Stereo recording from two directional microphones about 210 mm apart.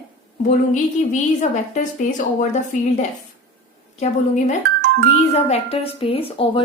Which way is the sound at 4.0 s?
35° left (ahead or behind).